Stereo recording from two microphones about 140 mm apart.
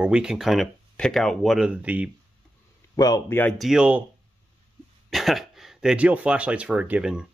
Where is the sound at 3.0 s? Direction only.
25° left (ahead or behind).